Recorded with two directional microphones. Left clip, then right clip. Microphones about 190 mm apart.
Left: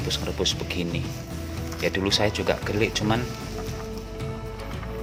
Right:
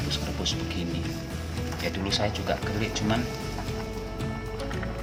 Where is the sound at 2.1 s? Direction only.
45° left (ahead or behind).